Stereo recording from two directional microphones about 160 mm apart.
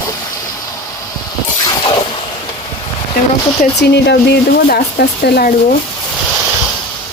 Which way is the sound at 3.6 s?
90° left.